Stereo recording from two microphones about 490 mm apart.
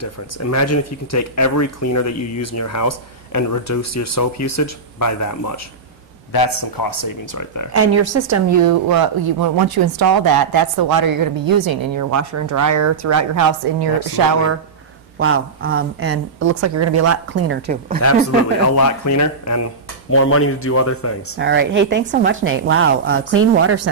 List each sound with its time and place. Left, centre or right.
0.0 s speech: left
7.7 s a woman's voice: right
15.1 s a woman's voice: right
18.8 s a man's voice: left
21.4 s a woman's voice: right